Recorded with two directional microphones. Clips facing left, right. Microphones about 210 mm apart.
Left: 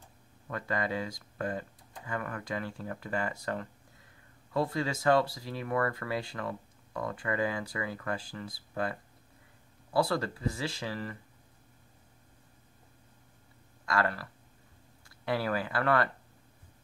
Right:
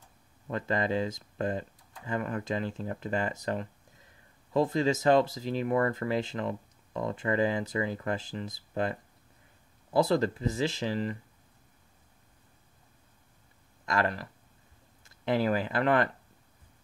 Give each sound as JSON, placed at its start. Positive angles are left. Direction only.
{"t": 0.5, "sound": "speech", "side_deg": -25}
{"t": 9.9, "sound": "speech", "side_deg": -20}
{"t": 13.8, "sound": "speech", "side_deg": -20}